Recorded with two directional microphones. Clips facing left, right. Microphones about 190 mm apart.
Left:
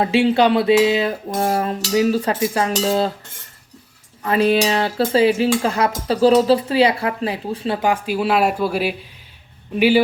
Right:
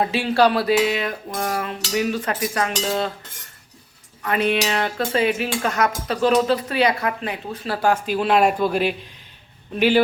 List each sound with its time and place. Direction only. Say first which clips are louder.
0.0 s a sound: left 3 dB; 25° left (ahead or behind)
2.8 s dishes: left 6 dB; 35° left (ahead or behind)
4.2 s dishes: left 5 dB; 30° left (ahead or behind)
7.8 s speech: right 2 dB; 10° left (ahead or behind)